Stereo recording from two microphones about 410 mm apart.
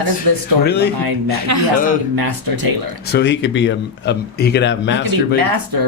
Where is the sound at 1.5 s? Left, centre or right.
Right.